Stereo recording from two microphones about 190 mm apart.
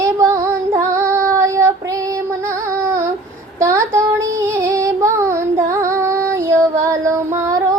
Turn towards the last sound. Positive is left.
turn(degrees=-15)  # may be behind; listen again after turning